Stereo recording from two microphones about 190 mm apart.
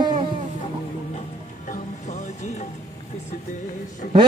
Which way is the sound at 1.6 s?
40° left (ahead or behind).